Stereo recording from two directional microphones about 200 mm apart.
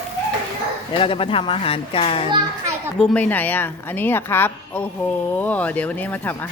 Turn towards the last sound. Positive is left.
turn(degrees=5)  # may be behind; listen again after turning